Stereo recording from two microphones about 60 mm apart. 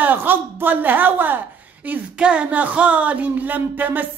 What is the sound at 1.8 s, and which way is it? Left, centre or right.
Speech, centre.